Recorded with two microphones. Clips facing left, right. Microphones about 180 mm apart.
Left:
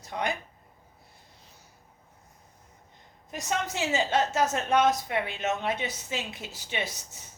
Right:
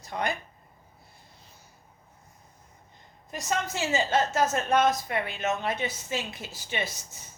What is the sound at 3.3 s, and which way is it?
A woman's voice, 15° left (ahead or behind).